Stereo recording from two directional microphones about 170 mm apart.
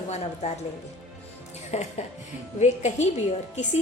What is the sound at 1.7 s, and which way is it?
A woman's voice, 40° left (ahead or behind).